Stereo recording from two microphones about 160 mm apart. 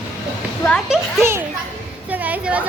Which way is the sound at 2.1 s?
10° right (ahead or behind).